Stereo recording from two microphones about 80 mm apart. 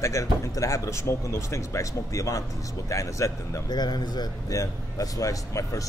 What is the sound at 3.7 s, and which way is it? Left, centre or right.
A man's voice, left.